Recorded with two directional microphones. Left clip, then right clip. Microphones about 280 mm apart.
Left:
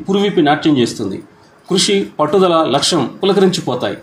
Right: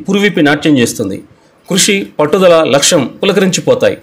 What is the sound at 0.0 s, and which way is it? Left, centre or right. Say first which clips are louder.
A man's voice: right 3 dB; right.